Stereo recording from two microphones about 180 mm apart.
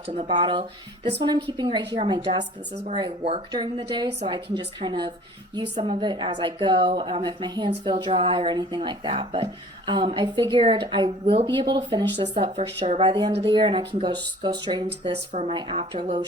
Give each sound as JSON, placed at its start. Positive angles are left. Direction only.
{"t": 0.3, "sound": "speech", "side_deg": -25}
{"t": 12.4, "sound": "speech", "side_deg": -35}
{"t": 15.3, "sound": "speech", "side_deg": -40}